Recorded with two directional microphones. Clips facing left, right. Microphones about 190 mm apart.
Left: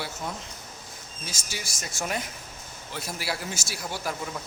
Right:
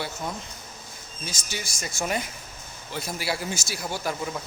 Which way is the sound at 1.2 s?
5° left (ahead or behind).